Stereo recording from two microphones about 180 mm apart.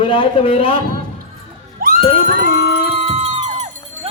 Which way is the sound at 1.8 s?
55° right (ahead or behind).